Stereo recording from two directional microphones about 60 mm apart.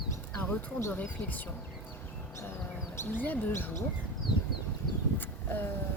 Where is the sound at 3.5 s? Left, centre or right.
Left.